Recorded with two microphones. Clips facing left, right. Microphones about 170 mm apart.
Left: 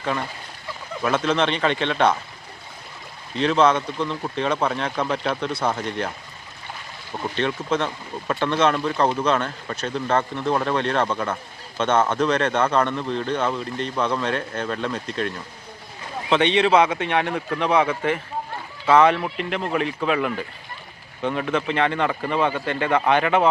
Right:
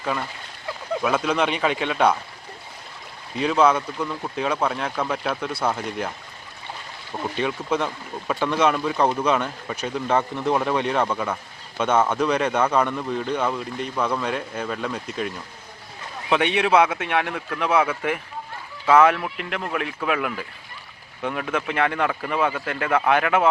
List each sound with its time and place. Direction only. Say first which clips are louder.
1.0 s a man's voice: left 2 dB; 5° right (ahead or behind)
3.3 s speech: left 1 dB; 10° right (ahead or behind)
7.3 s a man's voice: left 1 dB; 10° right (ahead or behind)
16.3 s speech: left 2 dB; 5° right (ahead or behind)